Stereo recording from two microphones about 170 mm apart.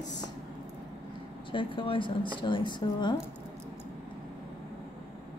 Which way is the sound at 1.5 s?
30° left (ahead or behind).